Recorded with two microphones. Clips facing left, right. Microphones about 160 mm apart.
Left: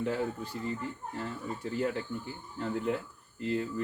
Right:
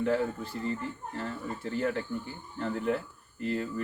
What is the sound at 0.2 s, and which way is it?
Speech, 15° left (ahead or behind).